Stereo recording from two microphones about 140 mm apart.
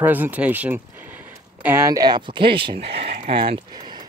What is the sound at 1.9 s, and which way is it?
Speech, 30° right (ahead or behind).